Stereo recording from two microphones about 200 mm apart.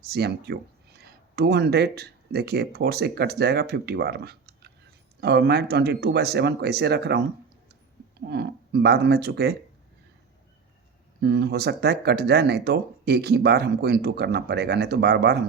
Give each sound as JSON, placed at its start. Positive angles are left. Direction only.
{"t": 0.1, "sound": "speech", "side_deg": -55}
{"t": 8.3, "sound": "speech", "side_deg": -55}
{"t": 11.2, "sound": "speech", "side_deg": -55}